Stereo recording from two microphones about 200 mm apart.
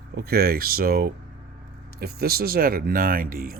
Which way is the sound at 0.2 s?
50° right (ahead or behind).